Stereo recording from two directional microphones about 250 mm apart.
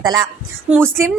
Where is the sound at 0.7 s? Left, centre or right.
Centre.